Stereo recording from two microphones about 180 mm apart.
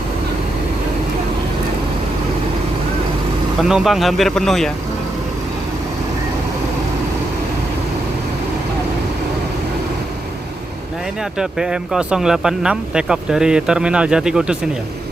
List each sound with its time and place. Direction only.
3.6 s speech: centre (ahead or behind)
11.3 s speech: 5° right (ahead or behind)